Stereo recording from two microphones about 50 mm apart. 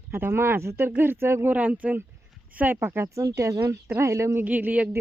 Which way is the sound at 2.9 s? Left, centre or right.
Right.